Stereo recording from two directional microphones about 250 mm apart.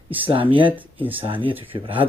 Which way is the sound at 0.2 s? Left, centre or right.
Right.